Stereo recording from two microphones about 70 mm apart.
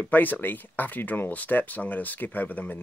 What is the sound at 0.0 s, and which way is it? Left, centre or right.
Speech, left.